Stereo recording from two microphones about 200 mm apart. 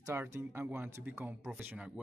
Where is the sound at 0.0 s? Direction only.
10° right (ahead or behind).